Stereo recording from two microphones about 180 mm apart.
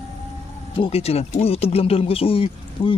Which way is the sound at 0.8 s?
35° left (ahead or behind).